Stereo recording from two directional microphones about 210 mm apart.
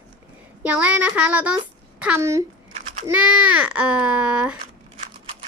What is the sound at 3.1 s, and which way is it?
A woman's voice, 5° right (ahead or behind).